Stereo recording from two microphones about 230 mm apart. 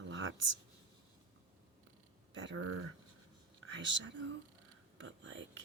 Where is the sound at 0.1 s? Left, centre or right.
Right.